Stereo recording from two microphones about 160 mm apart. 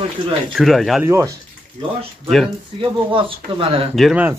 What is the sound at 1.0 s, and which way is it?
Speech, 15° right (ahead or behind).